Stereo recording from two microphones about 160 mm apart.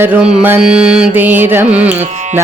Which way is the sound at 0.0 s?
10° right (ahead or behind).